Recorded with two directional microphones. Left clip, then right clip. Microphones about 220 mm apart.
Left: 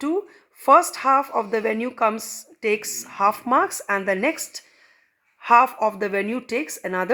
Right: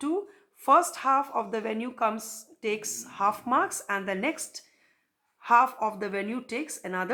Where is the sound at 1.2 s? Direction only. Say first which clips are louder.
Left 6 dB; 40° left (ahead or behind).